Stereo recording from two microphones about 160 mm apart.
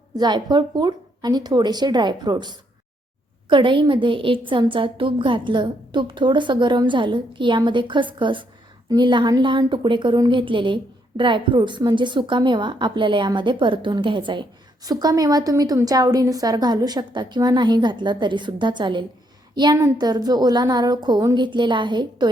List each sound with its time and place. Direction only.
0.2 s a woman's voice: 25° right (ahead or behind)